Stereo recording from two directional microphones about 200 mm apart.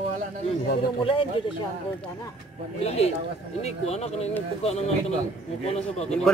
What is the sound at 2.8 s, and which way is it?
Speech, 30° left (ahead or behind).